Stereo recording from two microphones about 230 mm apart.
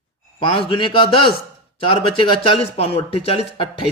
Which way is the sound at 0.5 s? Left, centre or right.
Left.